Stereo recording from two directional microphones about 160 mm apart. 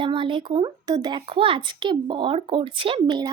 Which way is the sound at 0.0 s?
30° right (ahead or behind).